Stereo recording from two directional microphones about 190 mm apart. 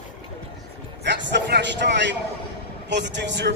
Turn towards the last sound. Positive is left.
turn(degrees=-70)  # may be behind; listen again after turning